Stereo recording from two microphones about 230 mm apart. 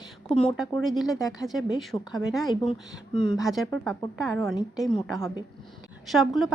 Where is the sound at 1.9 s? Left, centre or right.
Centre.